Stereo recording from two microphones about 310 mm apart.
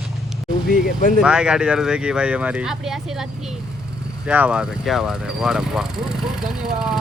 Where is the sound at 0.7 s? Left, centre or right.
Left.